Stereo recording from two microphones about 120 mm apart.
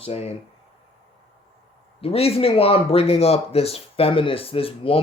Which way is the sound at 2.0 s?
55° left (ahead or behind).